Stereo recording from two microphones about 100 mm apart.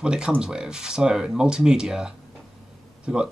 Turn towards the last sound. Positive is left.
turn(degrees=-10)  # may be behind; listen again after turning